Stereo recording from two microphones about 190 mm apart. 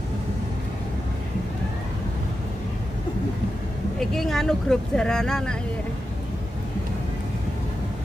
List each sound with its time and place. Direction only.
4.0 s speech: centre (ahead or behind)